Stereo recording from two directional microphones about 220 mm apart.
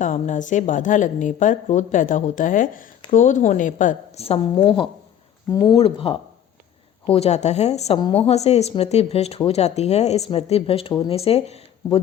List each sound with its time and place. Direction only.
0.0 s a woman's voice: 35° left (ahead or behind)